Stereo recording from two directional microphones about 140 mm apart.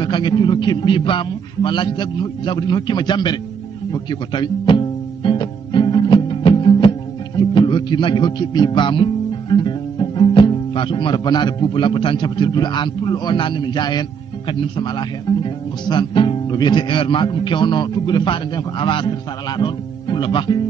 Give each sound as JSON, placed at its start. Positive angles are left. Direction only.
{"t": 0.0, "sound": "speech", "side_deg": 35}
{"t": 3.9, "sound": "music", "side_deg": 35}
{"t": 14.5, "sound": "speech", "side_deg": 35}